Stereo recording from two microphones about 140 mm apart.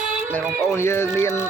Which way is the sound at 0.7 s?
20° left (ahead or behind).